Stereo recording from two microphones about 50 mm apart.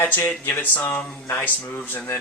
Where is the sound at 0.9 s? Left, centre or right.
Left.